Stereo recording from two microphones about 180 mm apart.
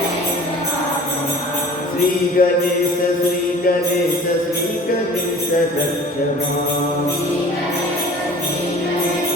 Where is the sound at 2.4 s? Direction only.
55° left (ahead or behind).